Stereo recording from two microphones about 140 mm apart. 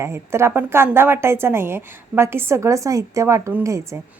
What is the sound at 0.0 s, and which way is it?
A woman's voice, 20° right (ahead or behind).